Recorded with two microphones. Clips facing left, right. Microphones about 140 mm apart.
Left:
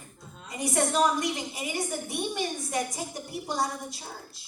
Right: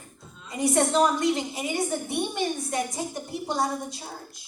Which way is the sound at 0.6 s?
25° right (ahead or behind).